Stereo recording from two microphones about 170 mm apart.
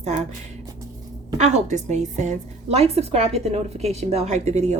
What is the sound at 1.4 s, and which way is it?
A woman's voice, 40° right (ahead or behind).